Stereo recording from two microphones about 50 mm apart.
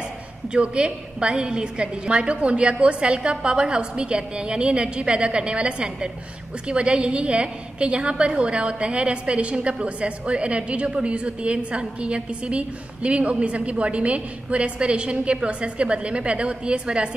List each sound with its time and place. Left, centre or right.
0.5 s a woman's voice: right